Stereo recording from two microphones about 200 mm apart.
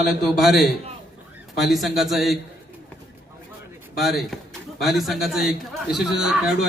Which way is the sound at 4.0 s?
Centre (ahead or behind).